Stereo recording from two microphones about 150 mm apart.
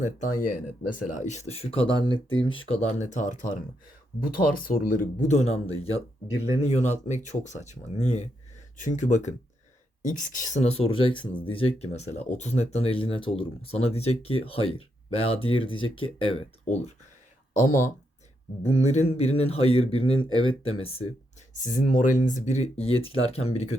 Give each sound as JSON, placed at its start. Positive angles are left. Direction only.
{"t": 0.0, "sound": "speech", "side_deg": 60}
{"t": 16.6, "sound": "speech", "side_deg": 50}
{"t": 17.5, "sound": "speech", "side_deg": 60}
{"t": 18.6, "sound": "speech", "side_deg": 45}
{"t": 21.5, "sound": "speech", "side_deg": 60}